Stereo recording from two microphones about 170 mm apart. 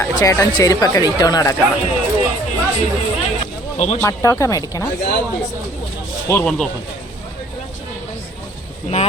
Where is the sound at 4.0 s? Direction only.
15° left (ahead or behind).